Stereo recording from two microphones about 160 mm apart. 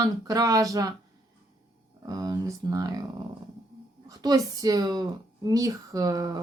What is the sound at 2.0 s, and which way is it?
Speech, 25° right (ahead or behind).